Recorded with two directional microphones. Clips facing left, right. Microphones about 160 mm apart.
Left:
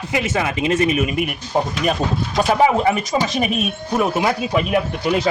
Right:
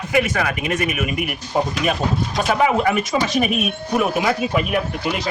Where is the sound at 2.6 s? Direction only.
30° left (ahead or behind).